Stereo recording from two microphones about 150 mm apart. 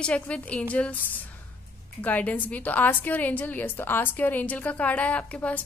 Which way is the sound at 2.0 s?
10° left (ahead or behind).